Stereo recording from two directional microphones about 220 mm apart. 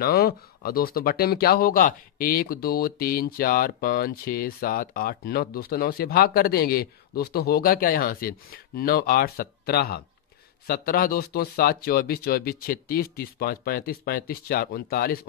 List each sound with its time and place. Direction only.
0.0 s speech: 45° left (ahead or behind)